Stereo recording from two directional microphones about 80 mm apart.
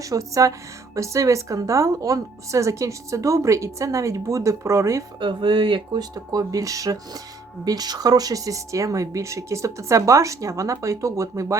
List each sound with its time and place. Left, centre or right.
0.0 s a woman's voice: right
5.2 s speech: right
6.1 s a woman's voice: right